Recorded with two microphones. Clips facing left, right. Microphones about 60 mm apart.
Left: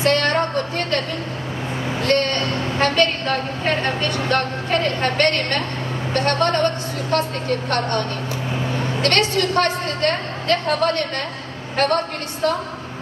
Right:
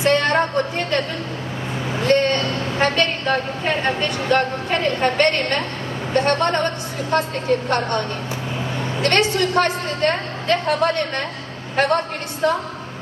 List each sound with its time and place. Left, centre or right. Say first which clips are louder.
0.0 s a woman's voice: right 1 dB; right
2.0 s a woman's voice: right 3 dB; right